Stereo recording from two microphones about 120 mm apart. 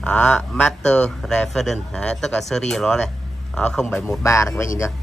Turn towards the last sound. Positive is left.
turn(degrees=25)  # may be behind; listen again after turning